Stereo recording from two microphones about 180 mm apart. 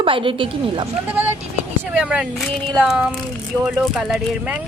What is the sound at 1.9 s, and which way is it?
Speech, 5° right (ahead or behind).